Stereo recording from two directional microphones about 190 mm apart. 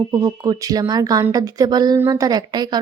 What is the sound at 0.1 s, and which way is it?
Speech, 20° right (ahead or behind).